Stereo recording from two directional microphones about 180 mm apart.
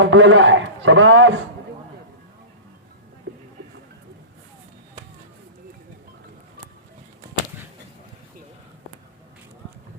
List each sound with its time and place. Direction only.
0.0 s a man's voice: 90° right